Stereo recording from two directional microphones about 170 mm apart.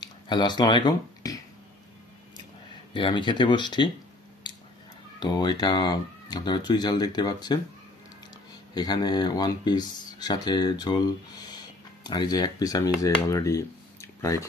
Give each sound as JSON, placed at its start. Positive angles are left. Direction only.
{"t": 0.0, "sound": "a sound", "side_deg": 25}
{"t": 2.9, "sound": "speech", "side_deg": 30}
{"t": 5.2, "sound": "speech", "side_deg": 25}
{"t": 8.7, "sound": "speech", "side_deg": 25}